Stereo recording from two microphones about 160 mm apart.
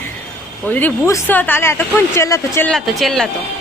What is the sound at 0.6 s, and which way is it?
A woman's voice, 10° left (ahead or behind).